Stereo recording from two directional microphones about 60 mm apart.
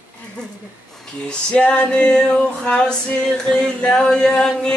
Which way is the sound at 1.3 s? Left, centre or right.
Centre.